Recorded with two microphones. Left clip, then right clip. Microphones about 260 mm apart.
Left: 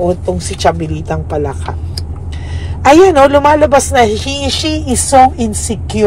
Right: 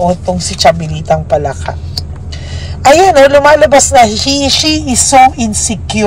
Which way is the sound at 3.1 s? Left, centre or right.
Centre.